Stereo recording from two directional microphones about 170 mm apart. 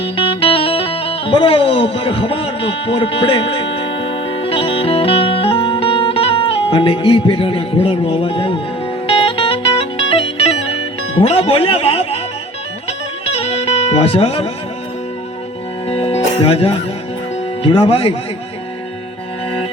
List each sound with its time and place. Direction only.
0.0 s music: 30° left (ahead or behind)
11.2 s speech: 35° left (ahead or behind)
13.2 s music: 35° left (ahead or behind)
15.9 s music: 35° left (ahead or behind)
17.6 s speech: 30° left (ahead or behind)